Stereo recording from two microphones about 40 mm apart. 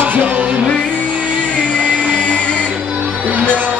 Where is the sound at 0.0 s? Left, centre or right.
Right.